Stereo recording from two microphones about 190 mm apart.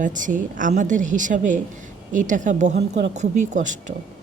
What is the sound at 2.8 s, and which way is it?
Speech, 65° right (ahead or behind).